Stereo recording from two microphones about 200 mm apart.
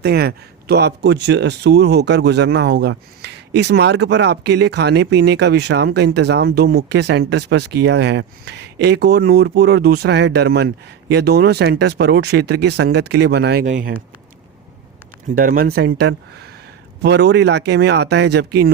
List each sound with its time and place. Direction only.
0.0 s speech: 50° right (ahead or behind)
13.7 s speech: 40° right (ahead or behind)
15.4 s speech: 45° right (ahead or behind)